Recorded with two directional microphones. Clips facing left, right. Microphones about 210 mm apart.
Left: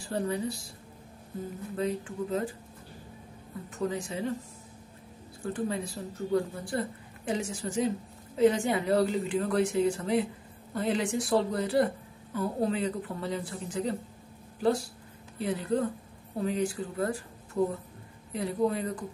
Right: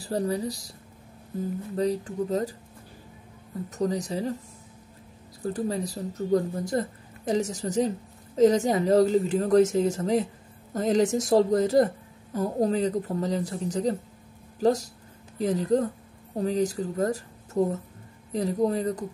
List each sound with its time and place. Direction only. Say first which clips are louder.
0.0 s speech: right 3 dB; 40° right (ahead or behind)
1.8 s speech: right 5 dB; 40° right (ahead or behind)
3.7 s speech: right 5 dB; 40° right (ahead or behind)
5.4 s speech: right 3 dB; 35° right (ahead or behind)